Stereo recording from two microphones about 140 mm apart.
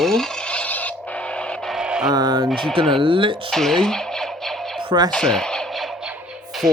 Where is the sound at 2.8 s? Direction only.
35° right (ahead or behind).